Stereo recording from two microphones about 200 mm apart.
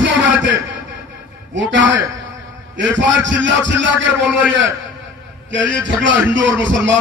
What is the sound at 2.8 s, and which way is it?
Speech, 65° right (ahead or behind).